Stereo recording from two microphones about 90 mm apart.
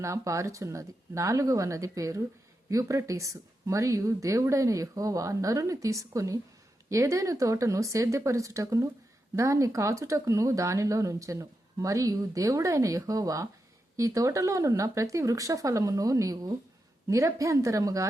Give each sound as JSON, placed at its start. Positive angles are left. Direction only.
{"t": 0.0, "sound": "speech", "side_deg": -35}